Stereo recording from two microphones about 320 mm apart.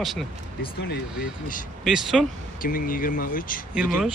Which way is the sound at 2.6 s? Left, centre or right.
Left.